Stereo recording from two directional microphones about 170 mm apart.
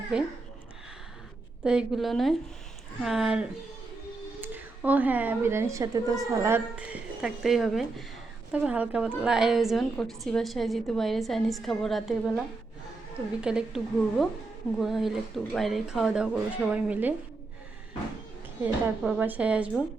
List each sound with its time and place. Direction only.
1.6 s a woman's voice: 5° right (ahead or behind)
18.6 s speech: 5° right (ahead or behind)